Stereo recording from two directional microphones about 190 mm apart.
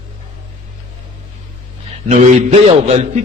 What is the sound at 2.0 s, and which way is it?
Speech, 40° right (ahead or behind).